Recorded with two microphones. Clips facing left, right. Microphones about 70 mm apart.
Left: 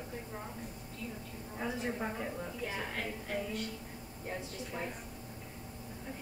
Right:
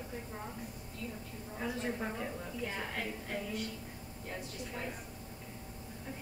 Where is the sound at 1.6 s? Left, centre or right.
Centre.